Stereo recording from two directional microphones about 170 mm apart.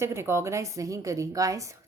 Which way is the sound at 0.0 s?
15° right (ahead or behind).